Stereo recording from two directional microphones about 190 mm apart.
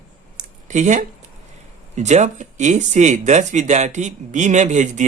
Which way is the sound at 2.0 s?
40° right (ahead or behind).